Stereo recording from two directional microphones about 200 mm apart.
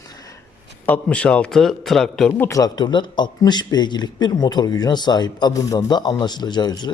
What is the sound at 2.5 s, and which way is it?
A man's voice, 20° left (ahead or behind).